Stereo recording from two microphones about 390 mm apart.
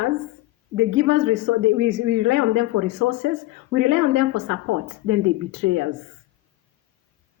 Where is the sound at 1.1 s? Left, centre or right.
Right.